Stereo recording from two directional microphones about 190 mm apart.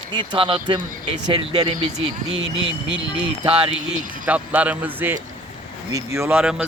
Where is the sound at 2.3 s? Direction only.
80° right.